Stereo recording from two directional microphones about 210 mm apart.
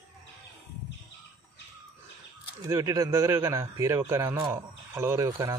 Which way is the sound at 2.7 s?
15° right (ahead or behind).